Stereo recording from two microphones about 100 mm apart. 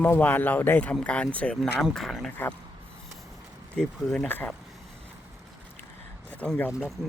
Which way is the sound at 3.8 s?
10° left (ahead or behind).